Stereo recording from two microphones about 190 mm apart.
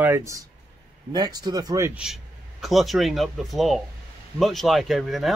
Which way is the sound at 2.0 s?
Centre (ahead or behind).